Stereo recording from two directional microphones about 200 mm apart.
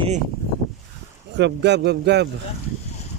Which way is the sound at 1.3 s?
60° right (ahead or behind).